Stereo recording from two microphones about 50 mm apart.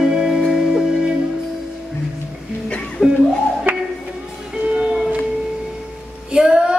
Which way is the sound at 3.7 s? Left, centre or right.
Right.